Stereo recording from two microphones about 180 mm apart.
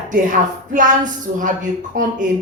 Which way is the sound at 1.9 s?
50° right (ahead or behind).